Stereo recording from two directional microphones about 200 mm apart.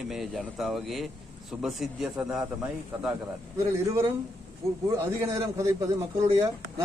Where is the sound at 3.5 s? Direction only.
15° right (ahead or behind).